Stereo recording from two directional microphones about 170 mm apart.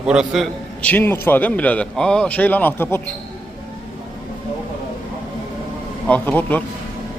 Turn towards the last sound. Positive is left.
turn(degrees=10)  # may be behind; listen again after turning